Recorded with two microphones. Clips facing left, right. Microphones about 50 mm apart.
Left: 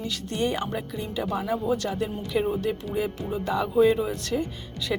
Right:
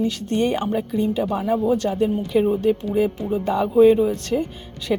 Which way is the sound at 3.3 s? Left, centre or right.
Right.